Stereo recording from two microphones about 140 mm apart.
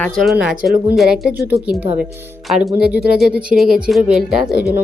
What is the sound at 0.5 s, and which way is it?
Speech, 80° right.